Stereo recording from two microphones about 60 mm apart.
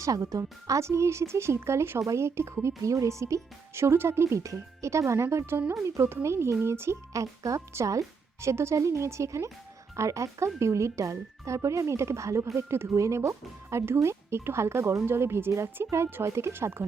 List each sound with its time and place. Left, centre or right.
0.0 s speech: right
7.1 s speech: right
12.5 s speech: right